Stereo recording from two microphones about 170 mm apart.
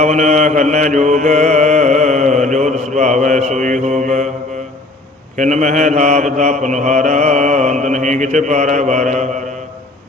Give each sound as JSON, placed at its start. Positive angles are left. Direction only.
{"t": 0.0, "sound": "mantra", "side_deg": -45}
{"t": 5.4, "sound": "mantra", "side_deg": -45}